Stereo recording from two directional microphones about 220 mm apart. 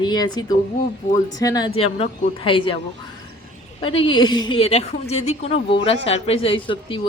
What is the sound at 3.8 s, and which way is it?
Speech, 25° left (ahead or behind).